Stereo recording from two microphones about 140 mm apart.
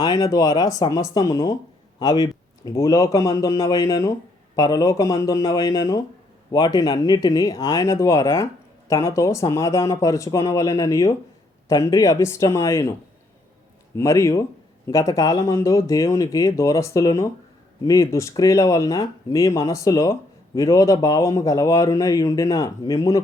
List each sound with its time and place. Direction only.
0.0 s speech: 25° left (ahead or behind)
13.9 s speech: 20° left (ahead or behind)